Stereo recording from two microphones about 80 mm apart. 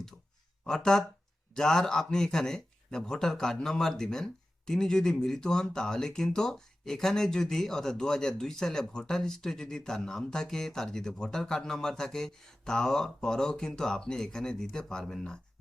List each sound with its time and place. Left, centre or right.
0.6 s speech: centre